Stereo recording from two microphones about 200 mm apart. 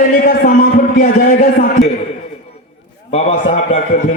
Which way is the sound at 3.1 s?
30° left (ahead or behind).